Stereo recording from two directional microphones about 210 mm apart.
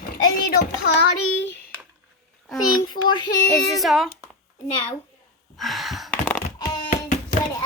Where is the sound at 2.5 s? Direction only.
20° left (ahead or behind).